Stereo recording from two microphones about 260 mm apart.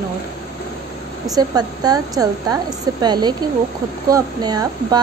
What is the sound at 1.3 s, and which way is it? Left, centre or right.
Speech, centre.